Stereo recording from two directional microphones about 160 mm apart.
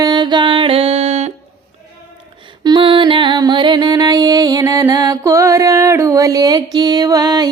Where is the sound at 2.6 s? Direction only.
30° right (ahead or behind).